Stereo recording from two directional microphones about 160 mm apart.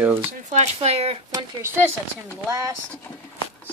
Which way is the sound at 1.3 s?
15° right (ahead or behind).